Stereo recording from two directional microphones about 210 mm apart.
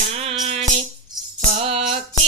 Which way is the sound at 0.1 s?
30° right (ahead or behind).